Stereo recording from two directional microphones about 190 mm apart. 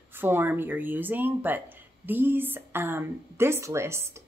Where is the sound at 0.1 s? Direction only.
10° right (ahead or behind).